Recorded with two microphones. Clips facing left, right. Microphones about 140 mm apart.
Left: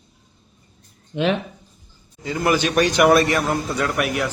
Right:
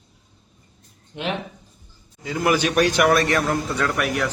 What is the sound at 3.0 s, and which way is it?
A man's voice, 10° left (ahead or behind).